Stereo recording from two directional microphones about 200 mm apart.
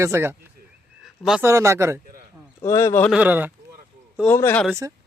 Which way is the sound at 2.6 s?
15° left (ahead or behind).